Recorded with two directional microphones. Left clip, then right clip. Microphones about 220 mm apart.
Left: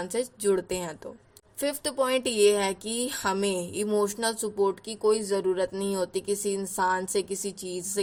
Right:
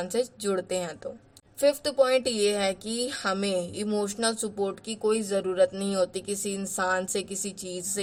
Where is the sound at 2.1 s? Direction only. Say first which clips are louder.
Left 2 dB; 25° left (ahead or behind).